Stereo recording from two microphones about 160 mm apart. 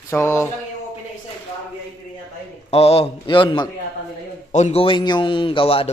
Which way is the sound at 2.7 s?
40° left (ahead or behind).